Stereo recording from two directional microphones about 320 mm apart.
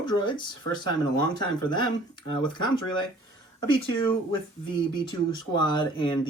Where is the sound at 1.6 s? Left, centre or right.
Centre.